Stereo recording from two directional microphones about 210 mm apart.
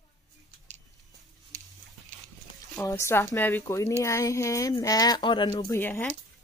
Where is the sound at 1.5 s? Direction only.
40° right (ahead or behind).